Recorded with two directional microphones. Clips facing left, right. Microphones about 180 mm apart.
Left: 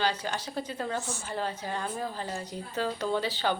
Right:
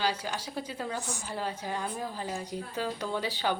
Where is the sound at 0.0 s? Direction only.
10° right (ahead or behind).